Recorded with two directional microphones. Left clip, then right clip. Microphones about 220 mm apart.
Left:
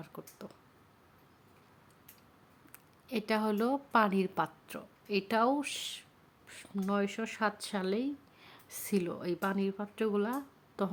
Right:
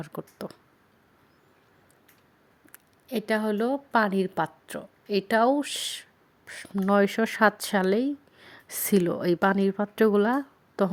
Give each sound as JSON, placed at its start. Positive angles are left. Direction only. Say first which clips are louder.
{"t": 0.0, "sound": "speech", "louder": "right 10 dB", "side_deg": -30}
{"t": 2.7, "sound": "speech", "louder": "right 6 dB", "side_deg": -15}